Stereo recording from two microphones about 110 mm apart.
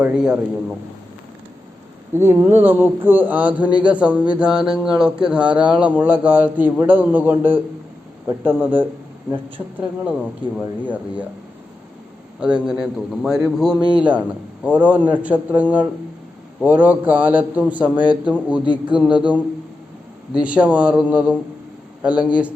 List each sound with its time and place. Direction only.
0.0 s speech: 10° right (ahead or behind)
2.1 s speech: 20° right (ahead or behind)
12.4 s speech: 10° right (ahead or behind)